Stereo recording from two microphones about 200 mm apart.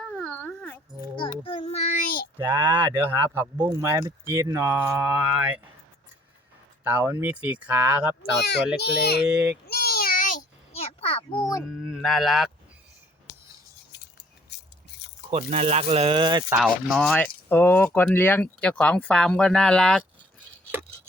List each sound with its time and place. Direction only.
0.0 s dog: 5° left (ahead or behind)
1.5 s child singing: 30° left (ahead or behind)
2.4 s speech: 10° right (ahead or behind)
6.8 s speech: 10° right (ahead or behind)
8.8 s a child's voice: 55° left (ahead or behind)
9.6 s a sound: 50° left (ahead or behind); by 11.6 s 20° left (ahead or behind)
11.7 s speech: centre (ahead or behind)
14.5 s a sound: 55° left (ahead or behind)
15.3 s speech: 30° right (ahead or behind)
16.5 s speech: 5° right (ahead or behind)
17.2 s speech: 10° left (ahead or behind)